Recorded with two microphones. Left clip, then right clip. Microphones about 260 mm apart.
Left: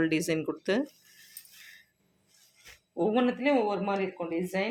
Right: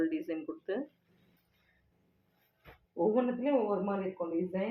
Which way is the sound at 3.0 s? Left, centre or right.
Left.